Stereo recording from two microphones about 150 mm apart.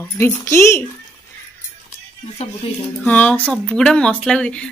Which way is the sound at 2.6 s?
40° left (ahead or behind).